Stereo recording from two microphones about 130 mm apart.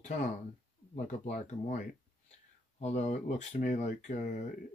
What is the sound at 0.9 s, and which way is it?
Speech, 70° left (ahead or behind).